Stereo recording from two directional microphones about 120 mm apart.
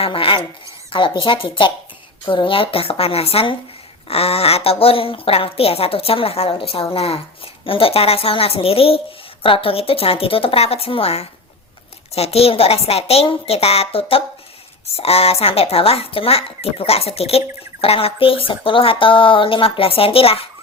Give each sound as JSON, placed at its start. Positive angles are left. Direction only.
{"t": 0.0, "sound": "a woman's voice", "side_deg": 50}